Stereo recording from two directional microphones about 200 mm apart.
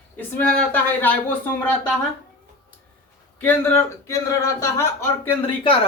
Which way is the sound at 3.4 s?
10° left (ahead or behind).